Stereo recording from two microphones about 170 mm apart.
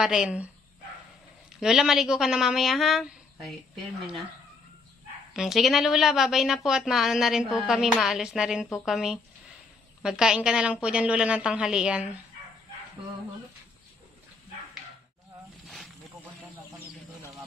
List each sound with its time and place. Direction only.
0.0 s a woman's voice: 5° right (ahead or behind)
1.6 s a woman's voice: 5° right (ahead or behind)
5.3 s a woman's voice: centre (ahead or behind)
15.6 s snake: centre (ahead or behind)